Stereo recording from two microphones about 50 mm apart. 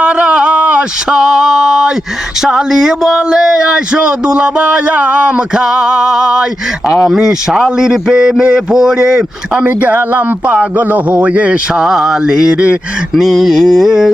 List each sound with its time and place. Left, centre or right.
0.0 s a sound: right
1.1 s a sound: centre
2.4 s speech: centre
9.6 s a man's voice: right
11.7 s speech: centre
13.1 s mantra: centre